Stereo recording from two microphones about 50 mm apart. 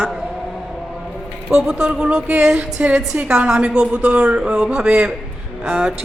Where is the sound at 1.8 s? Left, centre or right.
Centre.